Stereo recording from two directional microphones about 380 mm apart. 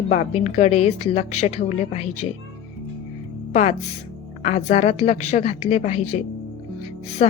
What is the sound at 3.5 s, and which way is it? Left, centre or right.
A woman's voice, centre.